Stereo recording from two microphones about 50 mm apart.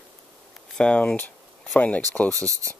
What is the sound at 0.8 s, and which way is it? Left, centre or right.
Speech, left.